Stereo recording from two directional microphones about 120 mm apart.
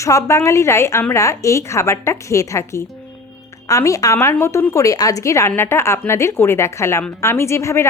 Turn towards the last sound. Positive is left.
turn(degrees=25)  # may be behind; listen again after turning